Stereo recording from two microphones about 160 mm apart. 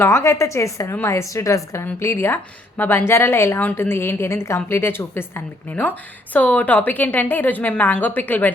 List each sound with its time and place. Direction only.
0.0 s a woman's voice: 15° left (ahead or behind)